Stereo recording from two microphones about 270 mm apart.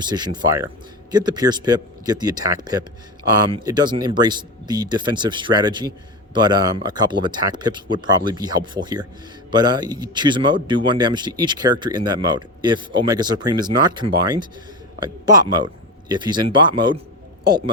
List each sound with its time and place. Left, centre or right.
0.0 s speech: centre